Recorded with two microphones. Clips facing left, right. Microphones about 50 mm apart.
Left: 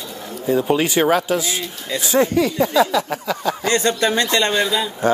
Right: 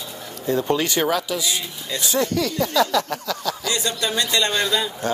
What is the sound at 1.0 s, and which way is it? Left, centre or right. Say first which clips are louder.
Speech: left 5 dB; left.